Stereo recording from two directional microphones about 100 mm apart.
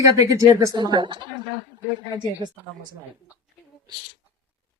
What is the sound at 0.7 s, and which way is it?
Speech, 45° right (ahead or behind).